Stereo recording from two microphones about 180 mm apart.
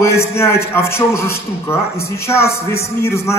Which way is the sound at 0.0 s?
15° left (ahead or behind).